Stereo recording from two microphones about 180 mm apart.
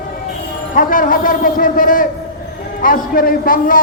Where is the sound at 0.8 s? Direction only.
50° left (ahead or behind).